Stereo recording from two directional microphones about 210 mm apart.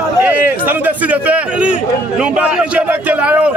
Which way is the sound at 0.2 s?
10° right (ahead or behind).